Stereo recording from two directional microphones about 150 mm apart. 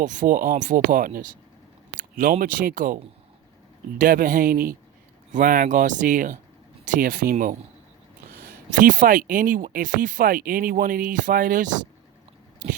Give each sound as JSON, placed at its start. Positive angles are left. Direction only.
{"t": 0.0, "sound": "speech", "side_deg": -60}
{"t": 2.0, "sound": "a sound", "side_deg": -65}
{"t": 2.4, "sound": "speech", "side_deg": -70}
{"t": 8.3, "sound": "speech", "side_deg": -85}